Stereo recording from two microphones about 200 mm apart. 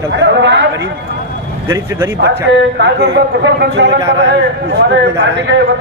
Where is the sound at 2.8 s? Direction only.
60° right (ahead or behind).